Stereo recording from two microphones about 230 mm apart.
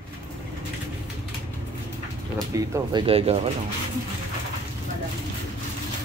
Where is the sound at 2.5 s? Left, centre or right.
Centre.